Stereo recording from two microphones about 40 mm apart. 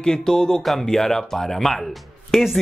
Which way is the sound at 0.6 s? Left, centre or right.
Centre.